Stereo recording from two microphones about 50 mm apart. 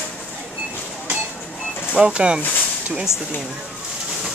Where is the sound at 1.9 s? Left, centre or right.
Centre.